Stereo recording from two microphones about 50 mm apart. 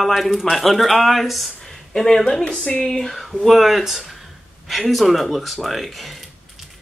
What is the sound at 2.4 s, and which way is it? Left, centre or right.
Speech, centre.